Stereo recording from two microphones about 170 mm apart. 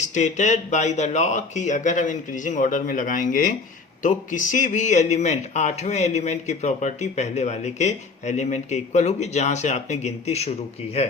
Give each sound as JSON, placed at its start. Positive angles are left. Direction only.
{"t": 0.0, "sound": "speech", "side_deg": 45}